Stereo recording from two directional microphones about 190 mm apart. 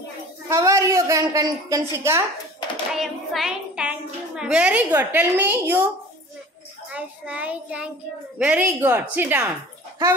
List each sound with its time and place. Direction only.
0.5 s a woman's voice: 15° right (ahead or behind)
3.0 s music: 5° right (ahead or behind)
4.4 s a woman's voice: 5° right (ahead or behind)
6.9 s a woman's voice: 5° right (ahead or behind)